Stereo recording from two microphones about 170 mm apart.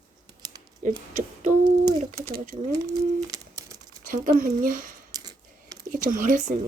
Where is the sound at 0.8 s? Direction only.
50° right (ahead or behind).